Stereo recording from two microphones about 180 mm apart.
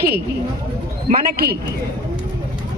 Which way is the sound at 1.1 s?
60° right (ahead or behind).